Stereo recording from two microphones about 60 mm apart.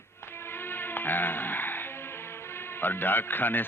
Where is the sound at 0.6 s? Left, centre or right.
Left.